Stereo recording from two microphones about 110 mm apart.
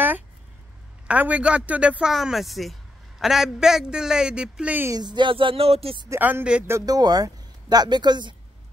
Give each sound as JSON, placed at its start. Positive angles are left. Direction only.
{"t": 1.0, "sound": "speech", "side_deg": -15}
{"t": 4.9, "sound": "speech", "side_deg": -45}
{"t": 6.0, "sound": "speech", "side_deg": -20}
{"t": 6.9, "sound": "speech", "side_deg": -35}